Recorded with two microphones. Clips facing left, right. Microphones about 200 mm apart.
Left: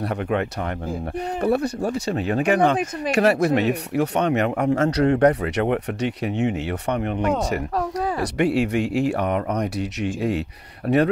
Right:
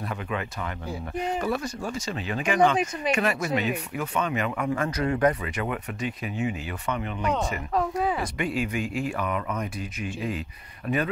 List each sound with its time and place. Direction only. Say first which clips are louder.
0.0 s speech: left 8 dB; 65° left (ahead or behind)
3.1 s speech: left 9 dB; 70° left (ahead or behind)
8.2 s speech: left 8 dB; 75° left (ahead or behind)